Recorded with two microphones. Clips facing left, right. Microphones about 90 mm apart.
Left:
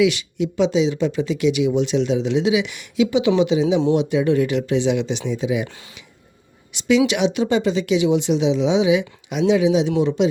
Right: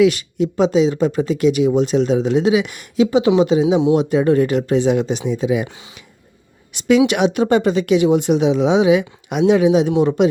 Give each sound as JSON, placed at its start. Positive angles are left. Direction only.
{"t": 0.0, "sound": "speech", "side_deg": -45}
{"t": 6.7, "sound": "speech", "side_deg": -50}